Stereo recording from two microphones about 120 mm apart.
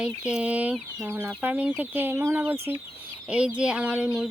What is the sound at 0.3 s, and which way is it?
Speech, 10° right (ahead or behind).